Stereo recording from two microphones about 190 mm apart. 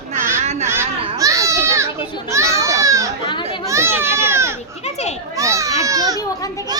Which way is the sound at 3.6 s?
15° right (ahead or behind).